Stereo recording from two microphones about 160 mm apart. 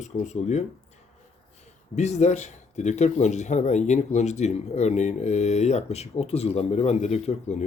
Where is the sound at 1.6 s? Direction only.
45° left (ahead or behind).